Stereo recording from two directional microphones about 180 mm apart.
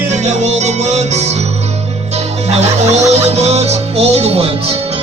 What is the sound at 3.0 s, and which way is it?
Music, 40° right (ahead or behind).